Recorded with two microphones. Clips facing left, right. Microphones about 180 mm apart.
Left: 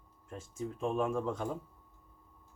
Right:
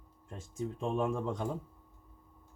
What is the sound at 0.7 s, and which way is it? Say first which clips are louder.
Speech: even; 30° right (ahead or behind).